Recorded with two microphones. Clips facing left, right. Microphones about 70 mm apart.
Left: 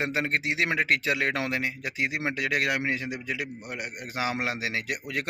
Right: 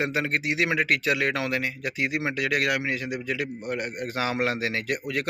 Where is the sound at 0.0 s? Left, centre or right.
Left.